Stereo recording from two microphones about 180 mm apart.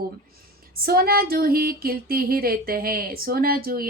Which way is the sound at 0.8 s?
55° right (ahead or behind).